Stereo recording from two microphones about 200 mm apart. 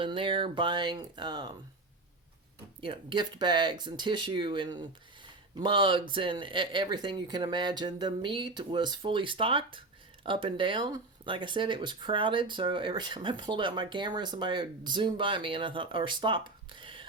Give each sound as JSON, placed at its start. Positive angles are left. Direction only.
{"t": 0.0, "sound": "speech", "side_deg": -25}
{"t": 2.8, "sound": "speech", "side_deg": -25}